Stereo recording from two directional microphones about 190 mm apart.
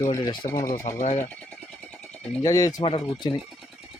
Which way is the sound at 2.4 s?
20° left (ahead or behind).